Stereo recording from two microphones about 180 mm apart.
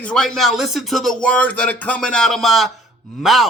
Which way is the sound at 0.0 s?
5° left (ahead or behind).